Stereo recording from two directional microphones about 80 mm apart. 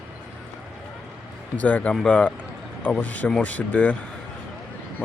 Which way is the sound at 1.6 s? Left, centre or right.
Centre.